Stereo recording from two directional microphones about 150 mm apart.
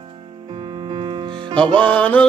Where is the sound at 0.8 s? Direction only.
35° right (ahead or behind).